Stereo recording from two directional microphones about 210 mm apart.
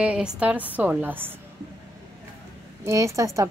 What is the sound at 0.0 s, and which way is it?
Speech, 5° right (ahead or behind).